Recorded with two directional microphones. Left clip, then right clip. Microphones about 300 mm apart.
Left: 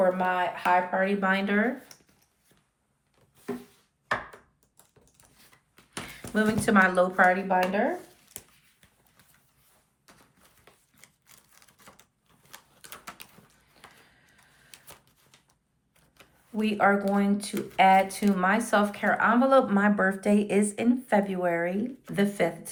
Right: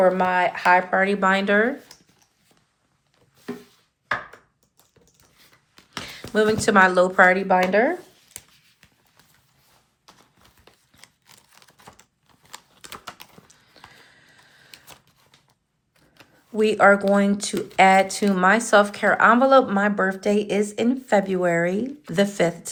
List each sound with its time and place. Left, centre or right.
0.0 s speech: centre
6.1 s speech: centre
10.1 s a sound: centre
11.0 s typewriter: centre
13.7 s a sound: centre
16.1 s speech: centre